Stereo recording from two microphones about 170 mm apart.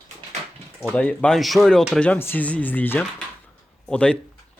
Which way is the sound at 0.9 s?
10° left (ahead or behind).